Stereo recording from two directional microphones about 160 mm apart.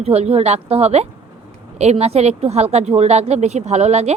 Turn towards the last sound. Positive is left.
turn(degrees=-45)  # may be behind; listen again after turning